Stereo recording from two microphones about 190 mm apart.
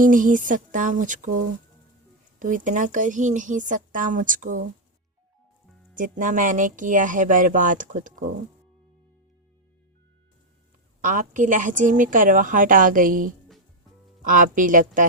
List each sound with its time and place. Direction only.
0.0 s speech: 45° right (ahead or behind)
2.4 s speech: 45° right (ahead or behind)
5.9 s speech: 45° right (ahead or behind)
11.0 s speech: 40° right (ahead or behind)